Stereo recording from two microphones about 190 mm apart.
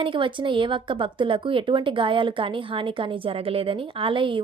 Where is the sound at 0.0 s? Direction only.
25° right (ahead or behind).